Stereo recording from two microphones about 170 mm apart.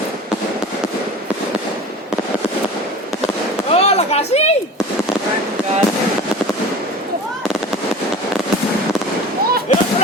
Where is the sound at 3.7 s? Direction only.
40° left (ahead or behind).